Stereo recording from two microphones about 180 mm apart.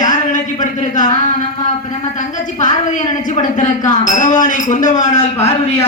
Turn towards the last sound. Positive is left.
turn(degrees=45)  # may be behind; listen again after turning